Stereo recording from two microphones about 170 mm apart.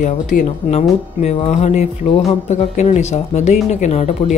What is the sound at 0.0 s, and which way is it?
Speech, 50° left (ahead or behind).